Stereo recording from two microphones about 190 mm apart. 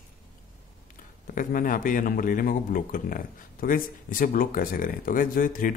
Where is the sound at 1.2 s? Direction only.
45° left (ahead or behind).